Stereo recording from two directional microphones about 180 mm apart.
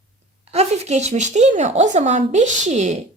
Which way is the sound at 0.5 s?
35° right (ahead or behind).